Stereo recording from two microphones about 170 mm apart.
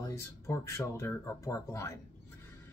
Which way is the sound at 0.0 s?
15° left (ahead or behind).